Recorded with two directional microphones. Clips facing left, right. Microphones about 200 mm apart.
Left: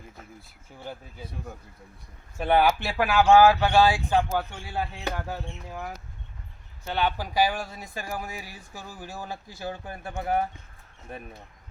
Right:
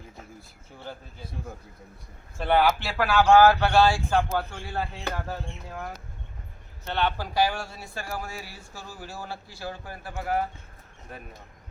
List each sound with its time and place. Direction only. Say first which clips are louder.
0.9 s a man's voice: left 1 dB; 10° left (ahead or behind)
2.4 s a man's voice: left 1 dB; 15° left (ahead or behind)